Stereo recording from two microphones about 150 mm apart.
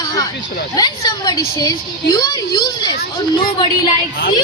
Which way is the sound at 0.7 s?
25° left (ahead or behind).